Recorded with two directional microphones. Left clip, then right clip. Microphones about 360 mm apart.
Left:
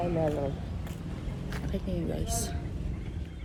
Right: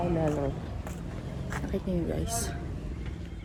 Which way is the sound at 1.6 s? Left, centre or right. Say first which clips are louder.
Right 3 dB; centre.